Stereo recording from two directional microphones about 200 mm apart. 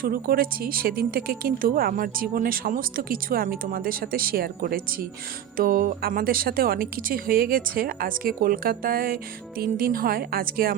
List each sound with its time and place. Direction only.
0.0 s a woman's voice: 45° right (ahead or behind)